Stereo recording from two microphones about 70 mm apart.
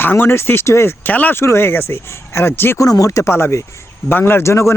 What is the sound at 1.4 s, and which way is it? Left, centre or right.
Speech, left.